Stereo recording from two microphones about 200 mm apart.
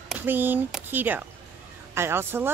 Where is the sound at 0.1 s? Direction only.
10° right (ahead or behind).